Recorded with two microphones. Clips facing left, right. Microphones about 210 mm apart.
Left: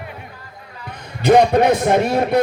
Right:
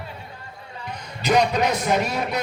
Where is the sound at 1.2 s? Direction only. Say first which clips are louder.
Left 8 dB; 55° left (ahead or behind).